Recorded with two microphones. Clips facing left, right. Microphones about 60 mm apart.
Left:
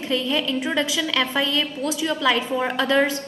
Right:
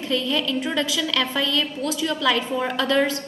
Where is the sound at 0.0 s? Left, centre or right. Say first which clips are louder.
Even; centre.